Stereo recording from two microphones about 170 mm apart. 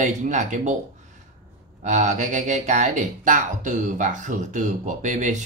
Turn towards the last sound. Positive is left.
turn(degrees=-45)  # may be behind; listen again after turning